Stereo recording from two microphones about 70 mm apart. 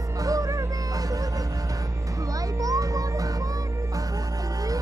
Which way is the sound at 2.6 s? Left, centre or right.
Right.